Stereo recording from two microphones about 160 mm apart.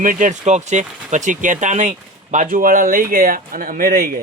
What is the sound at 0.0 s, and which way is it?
A man's voice, 55° right (ahead or behind).